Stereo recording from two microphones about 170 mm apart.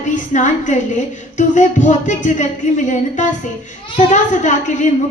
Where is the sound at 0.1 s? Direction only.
45° left (ahead or behind).